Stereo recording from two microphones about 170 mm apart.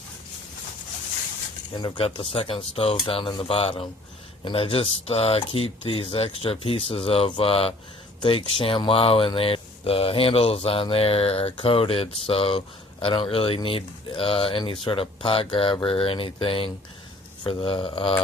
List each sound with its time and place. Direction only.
1.7 s speech: 30° left (ahead or behind)